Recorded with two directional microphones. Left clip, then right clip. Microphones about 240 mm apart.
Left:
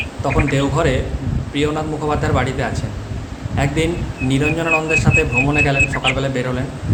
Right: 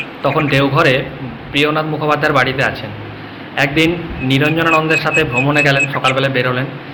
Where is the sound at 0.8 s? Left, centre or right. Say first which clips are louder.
Right 6 dB; centre.